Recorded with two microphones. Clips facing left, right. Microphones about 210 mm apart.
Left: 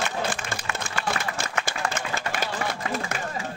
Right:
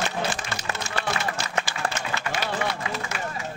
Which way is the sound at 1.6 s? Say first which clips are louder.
Even; 50° left (ahead or behind).